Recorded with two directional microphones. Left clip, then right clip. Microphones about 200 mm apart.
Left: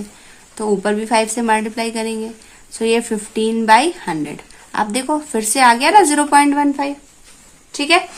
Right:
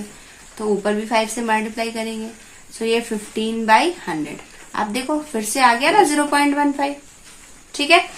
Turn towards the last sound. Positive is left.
turn(degrees=35)  # may be behind; listen again after turning